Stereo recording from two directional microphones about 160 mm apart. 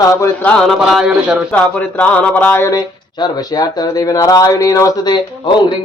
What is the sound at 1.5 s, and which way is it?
Speech, 5° left (ahead or behind).